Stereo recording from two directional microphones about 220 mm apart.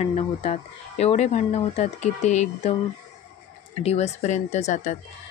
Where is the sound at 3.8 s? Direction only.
30° left (ahead or behind).